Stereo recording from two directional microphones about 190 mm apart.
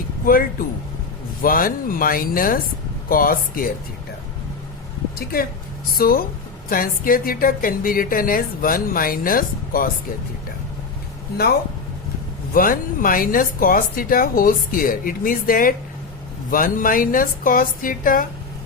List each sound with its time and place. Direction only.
0.3 s speech: 50° left (ahead or behind)
5.1 s speech: 50° left (ahead or behind)
12.5 s speech: 45° left (ahead or behind)